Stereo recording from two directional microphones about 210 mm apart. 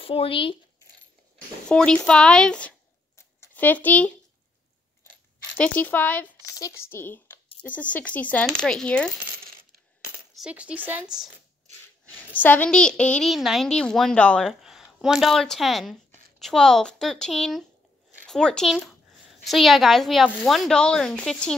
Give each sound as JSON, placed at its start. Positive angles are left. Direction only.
{"t": 0.0, "sound": "speech", "side_deg": 25}
{"t": 1.7, "sound": "a woman's voice", "side_deg": 5}
{"t": 5.6, "sound": "a woman's voice", "side_deg": 10}
{"t": 10.3, "sound": "a woman's voice", "side_deg": -5}
{"t": 12.4, "sound": "a woman's voice", "side_deg": 10}